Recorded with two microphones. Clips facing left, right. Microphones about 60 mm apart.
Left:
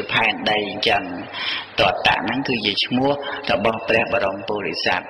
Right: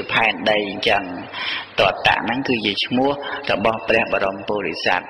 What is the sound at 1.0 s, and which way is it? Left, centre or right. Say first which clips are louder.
Speech: right 1 dB; right.